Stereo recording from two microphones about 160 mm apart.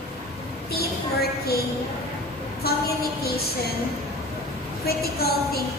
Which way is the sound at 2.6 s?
75° left (ahead or behind).